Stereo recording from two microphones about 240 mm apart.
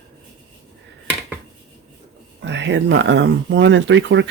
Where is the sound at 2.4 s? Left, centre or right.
Right.